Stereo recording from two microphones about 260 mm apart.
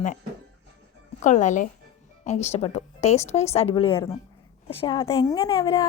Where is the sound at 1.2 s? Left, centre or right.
Left.